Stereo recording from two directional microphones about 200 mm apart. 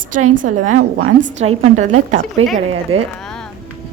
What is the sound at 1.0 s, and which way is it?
Speech, 65° right (ahead or behind).